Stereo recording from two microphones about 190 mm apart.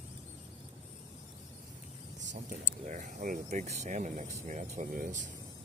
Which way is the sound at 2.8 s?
40° right (ahead or behind).